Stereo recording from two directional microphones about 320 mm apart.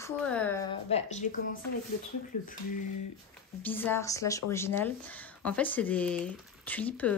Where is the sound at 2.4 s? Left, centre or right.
Left.